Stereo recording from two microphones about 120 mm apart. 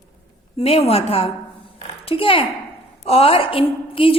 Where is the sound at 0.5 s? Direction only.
55° left (ahead or behind).